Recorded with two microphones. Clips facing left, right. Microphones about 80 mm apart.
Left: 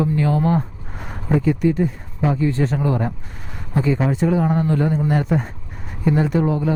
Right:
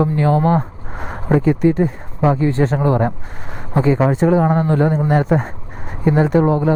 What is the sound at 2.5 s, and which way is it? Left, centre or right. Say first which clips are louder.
Speech: right 4 dB; right.